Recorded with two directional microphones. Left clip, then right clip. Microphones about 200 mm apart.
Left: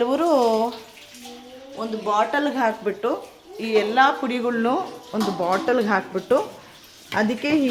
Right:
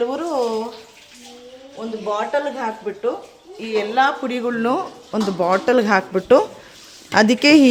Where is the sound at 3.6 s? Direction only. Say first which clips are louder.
Even; 10° left (ahead or behind); by 4.9 s 20° right (ahead or behind).